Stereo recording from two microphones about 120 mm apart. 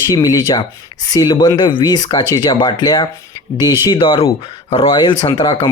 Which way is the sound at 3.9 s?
45° left (ahead or behind).